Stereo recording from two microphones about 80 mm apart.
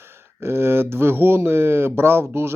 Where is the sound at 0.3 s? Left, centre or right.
Right.